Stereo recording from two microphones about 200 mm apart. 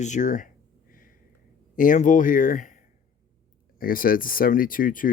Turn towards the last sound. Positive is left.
turn(degrees=45)  # may be behind; listen again after turning